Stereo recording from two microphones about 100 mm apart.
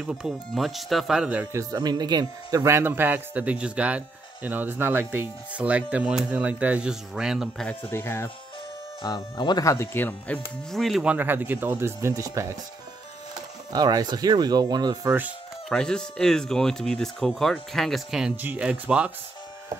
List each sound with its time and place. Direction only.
0.6 s speech: centre (ahead or behind)
1.5 s speech: 35° right (ahead or behind)
2.6 s speech: 25° right (ahead or behind); by 7.4 s 5° right (ahead or behind)
7.9 s speech: 25° left (ahead or behind)
9.0 s speech: 45° left (ahead or behind)
9.7 s speech: 25° left (ahead or behind)
10.7 s speech: centre (ahead or behind)
11.1 s speech: 20° right (ahead or behind)
12.1 s speech: 35° right (ahead or behind)
13.7 s speech: 40° right (ahead or behind)
15.7 s speech: 10° left (ahead or behind)
18.3 s speech: 20° right (ahead or behind)